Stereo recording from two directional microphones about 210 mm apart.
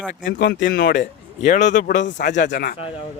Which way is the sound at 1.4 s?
35° left (ahead or behind).